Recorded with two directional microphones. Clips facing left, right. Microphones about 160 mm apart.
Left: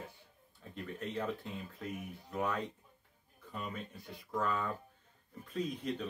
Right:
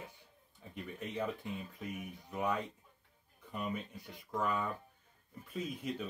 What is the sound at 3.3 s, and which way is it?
Speech, 15° right (ahead or behind).